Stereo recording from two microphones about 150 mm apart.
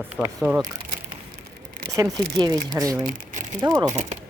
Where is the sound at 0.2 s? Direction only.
5° right (ahead or behind).